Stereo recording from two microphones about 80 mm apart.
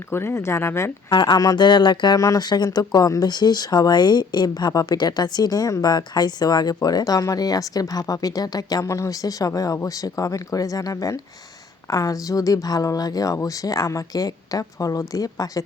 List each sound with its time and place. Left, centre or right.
0.1 s speech: left
1.1 s speech: left
2.1 s speech: left
2.6 s speech: left